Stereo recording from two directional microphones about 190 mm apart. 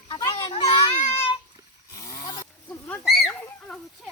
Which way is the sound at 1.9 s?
15° left (ahead or behind).